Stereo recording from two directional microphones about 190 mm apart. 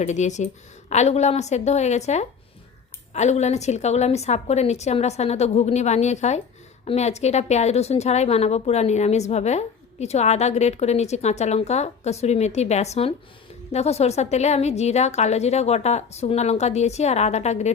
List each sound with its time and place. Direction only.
0.0 s a woman's voice: 40° left (ahead or behind)